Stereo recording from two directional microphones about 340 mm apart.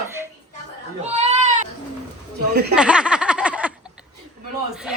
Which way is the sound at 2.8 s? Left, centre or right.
Centre.